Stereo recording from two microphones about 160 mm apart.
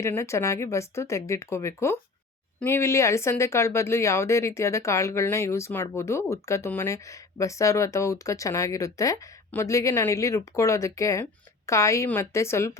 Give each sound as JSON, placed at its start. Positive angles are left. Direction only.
{"t": 0.0, "sound": "speech", "side_deg": 20}